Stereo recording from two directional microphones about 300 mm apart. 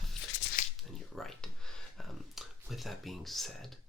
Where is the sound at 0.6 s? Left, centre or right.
Left.